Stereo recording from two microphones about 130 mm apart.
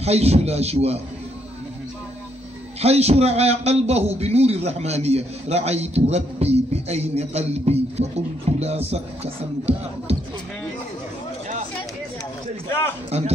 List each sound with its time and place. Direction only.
0.0 s a man's voice: 55° right (ahead or behind)
2.8 s a man's voice: 55° right (ahead or behind)